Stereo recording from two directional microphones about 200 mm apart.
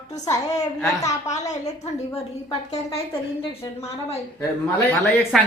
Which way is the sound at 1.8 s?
30° left (ahead or behind).